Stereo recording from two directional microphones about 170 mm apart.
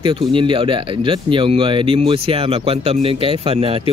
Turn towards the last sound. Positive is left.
turn(degrees=-35)  # may be behind; listen again after turning